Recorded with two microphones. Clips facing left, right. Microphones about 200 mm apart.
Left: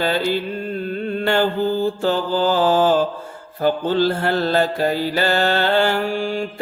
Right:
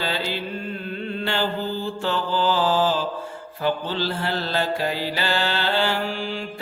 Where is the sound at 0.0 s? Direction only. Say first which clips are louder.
Left 7 dB; 50° left (ahead or behind).